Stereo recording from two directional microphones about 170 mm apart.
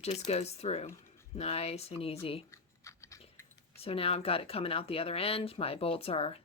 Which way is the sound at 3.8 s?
35° left (ahead or behind).